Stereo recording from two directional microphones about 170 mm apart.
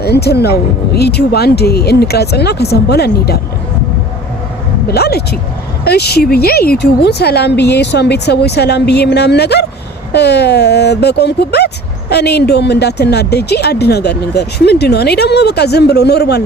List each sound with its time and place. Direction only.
0.0 s speech: 70° left (ahead or behind)
4.9 s speech: 70° left (ahead or behind)